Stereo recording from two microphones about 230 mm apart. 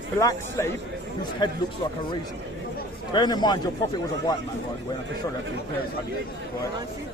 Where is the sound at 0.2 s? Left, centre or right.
Centre.